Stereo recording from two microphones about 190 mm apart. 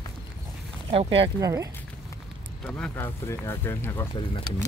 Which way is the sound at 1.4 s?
20° right (ahead or behind).